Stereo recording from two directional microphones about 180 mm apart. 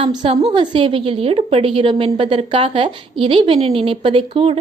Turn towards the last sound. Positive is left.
turn(degrees=-30)  # may be behind; listen again after turning